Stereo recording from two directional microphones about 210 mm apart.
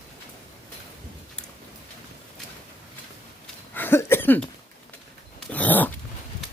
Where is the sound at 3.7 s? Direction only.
10° left (ahead or behind).